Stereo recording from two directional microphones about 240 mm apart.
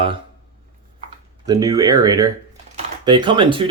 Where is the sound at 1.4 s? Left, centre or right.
Centre.